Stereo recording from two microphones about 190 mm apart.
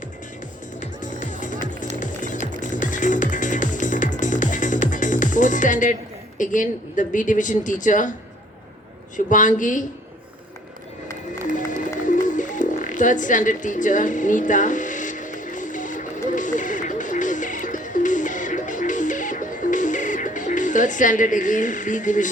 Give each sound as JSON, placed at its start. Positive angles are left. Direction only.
{"t": 0.8, "sound": "music", "side_deg": 40}
{"t": 6.4, "sound": "speech", "side_deg": 45}
{"t": 9.1, "sound": "speech", "side_deg": 40}
{"t": 11.9, "sound": "music", "side_deg": 40}